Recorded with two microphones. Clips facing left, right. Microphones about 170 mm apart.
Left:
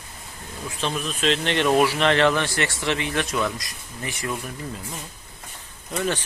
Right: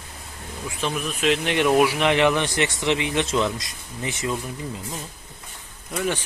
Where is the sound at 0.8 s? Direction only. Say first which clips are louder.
Right 1 dB; 15° right (ahead or behind).